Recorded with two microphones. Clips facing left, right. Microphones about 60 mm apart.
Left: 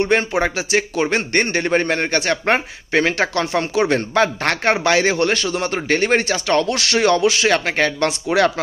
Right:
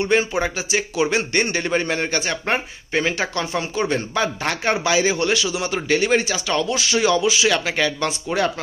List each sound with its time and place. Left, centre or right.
0.0 s a man's voice: left
7.4 s a man's voice: left
8.1 s speech: left